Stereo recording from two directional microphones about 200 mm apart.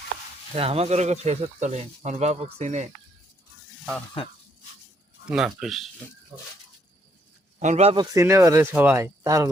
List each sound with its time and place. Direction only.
0.5 s speech: 30° right (ahead or behind)
5.2 s speech: 5° right (ahead or behind)
7.6 s speech: 35° right (ahead or behind)
8.1 s speech: 15° right (ahead or behind)